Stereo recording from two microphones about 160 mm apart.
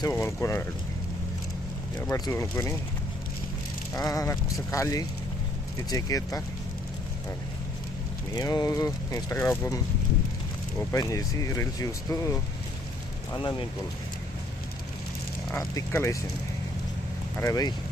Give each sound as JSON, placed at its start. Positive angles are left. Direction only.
{"t": 0.0, "sound": "speech", "side_deg": 15}
{"t": 2.0, "sound": "speech", "side_deg": 20}
{"t": 3.9, "sound": "speech", "side_deg": 20}
{"t": 8.4, "sound": "speech", "side_deg": 20}
{"t": 10.9, "sound": "speech", "side_deg": 20}
{"t": 15.5, "sound": "speech", "side_deg": 15}
{"t": 17.4, "sound": "speech", "side_deg": 25}